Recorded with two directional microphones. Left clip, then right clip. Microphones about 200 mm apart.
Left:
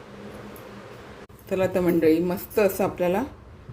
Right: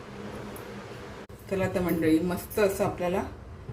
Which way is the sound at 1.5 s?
50° left (ahead or behind).